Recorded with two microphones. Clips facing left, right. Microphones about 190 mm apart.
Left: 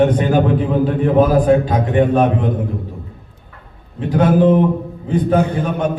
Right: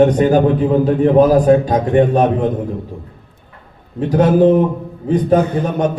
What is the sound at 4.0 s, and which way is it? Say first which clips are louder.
A man's voice: right 2 dB; 40° right (ahead or behind).